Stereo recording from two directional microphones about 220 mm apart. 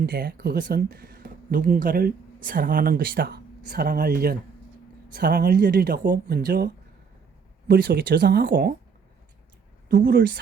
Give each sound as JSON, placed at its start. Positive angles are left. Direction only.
{"t": 0.0, "sound": "speech", "side_deg": -40}
{"t": 7.7, "sound": "speech", "side_deg": -40}
{"t": 9.9, "sound": "speech", "side_deg": -40}